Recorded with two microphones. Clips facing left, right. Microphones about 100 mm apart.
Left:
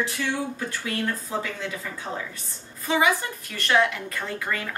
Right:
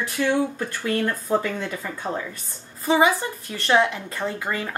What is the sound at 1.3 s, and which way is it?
Speech, 50° right (ahead or behind).